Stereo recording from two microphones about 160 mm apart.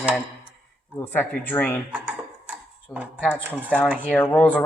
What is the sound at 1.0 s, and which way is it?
Speech, 10° left (ahead or behind).